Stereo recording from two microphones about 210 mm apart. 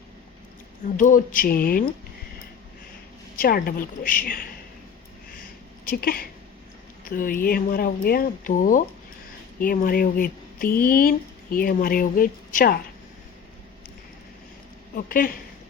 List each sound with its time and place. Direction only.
0.9 s speech: 40° left (ahead or behind)
3.3 s speech: 45° left (ahead or behind)
5.8 s speech: 45° left (ahead or behind)
14.9 s speech: 40° left (ahead or behind)